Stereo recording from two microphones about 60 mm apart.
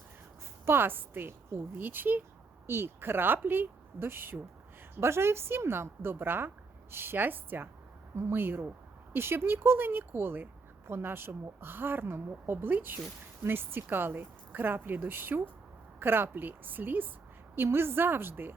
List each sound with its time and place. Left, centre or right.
0.6 s a woman's voice: right